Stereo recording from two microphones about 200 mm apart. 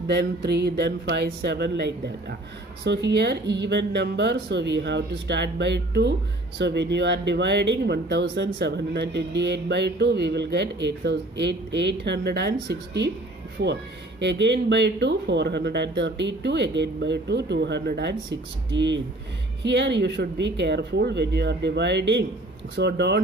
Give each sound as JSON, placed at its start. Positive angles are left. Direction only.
{"t": 0.1, "sound": "speech", "side_deg": -55}
{"t": 14.2, "sound": "speech", "side_deg": -60}